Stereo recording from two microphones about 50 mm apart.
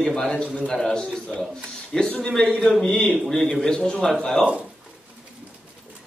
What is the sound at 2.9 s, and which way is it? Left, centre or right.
A man's voice, centre.